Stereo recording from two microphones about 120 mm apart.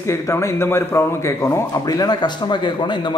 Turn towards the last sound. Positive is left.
turn(degrees=40)  # may be behind; listen again after turning